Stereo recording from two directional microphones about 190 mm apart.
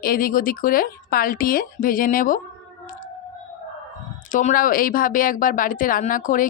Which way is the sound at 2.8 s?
45° left (ahead or behind).